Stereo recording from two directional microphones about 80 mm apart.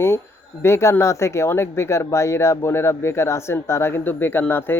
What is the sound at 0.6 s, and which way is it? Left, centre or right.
Speech, left.